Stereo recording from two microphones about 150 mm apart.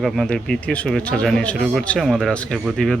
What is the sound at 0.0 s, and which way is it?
Speech, 5° left (ahead or behind).